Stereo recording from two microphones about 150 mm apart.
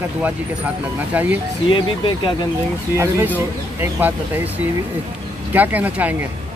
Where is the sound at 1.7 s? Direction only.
35° left (ahead or behind).